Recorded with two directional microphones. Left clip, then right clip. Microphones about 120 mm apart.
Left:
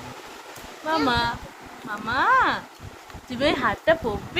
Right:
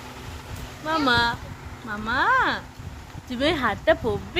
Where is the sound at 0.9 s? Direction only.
30° right (ahead or behind).